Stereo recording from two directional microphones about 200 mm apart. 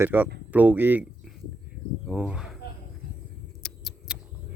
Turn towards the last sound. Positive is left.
turn(degrees=0)  # may be behind; listen again after turning